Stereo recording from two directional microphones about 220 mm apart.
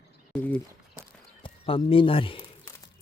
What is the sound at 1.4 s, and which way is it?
A man's voice, 25° left (ahead or behind).